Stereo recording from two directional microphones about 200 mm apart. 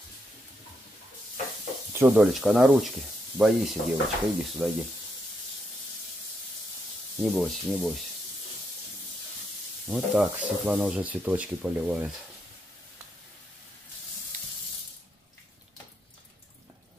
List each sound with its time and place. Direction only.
2.0 s speech: 5° right (ahead or behind)
7.2 s speech: centre (ahead or behind)
9.8 s speech: centre (ahead or behind)